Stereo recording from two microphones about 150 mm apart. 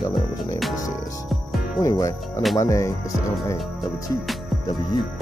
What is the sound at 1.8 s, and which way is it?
Speech, 20° left (ahead or behind).